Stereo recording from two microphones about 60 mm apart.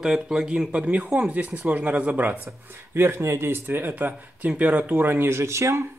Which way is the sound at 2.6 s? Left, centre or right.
Right.